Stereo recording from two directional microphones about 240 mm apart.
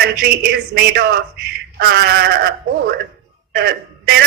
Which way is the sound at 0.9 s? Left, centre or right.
Right.